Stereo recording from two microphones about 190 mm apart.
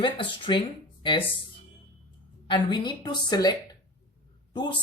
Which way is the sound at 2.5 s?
25° left (ahead or behind).